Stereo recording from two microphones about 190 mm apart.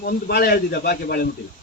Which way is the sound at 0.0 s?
55° left (ahead or behind).